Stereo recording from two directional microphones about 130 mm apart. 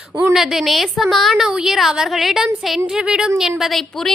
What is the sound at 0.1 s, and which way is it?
Speech, 20° right (ahead or behind).